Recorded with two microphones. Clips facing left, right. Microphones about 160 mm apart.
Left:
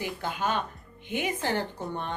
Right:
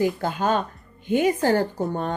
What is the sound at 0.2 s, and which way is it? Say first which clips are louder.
A woman's voice: right 6 dB; 40° right (ahead or behind).